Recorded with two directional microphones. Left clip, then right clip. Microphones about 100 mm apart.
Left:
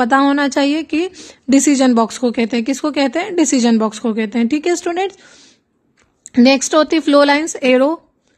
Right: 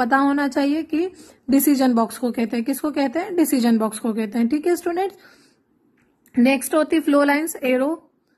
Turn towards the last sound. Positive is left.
turn(degrees=35)  # may be behind; listen again after turning